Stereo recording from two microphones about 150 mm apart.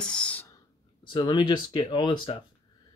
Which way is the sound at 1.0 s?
30° left (ahead or behind).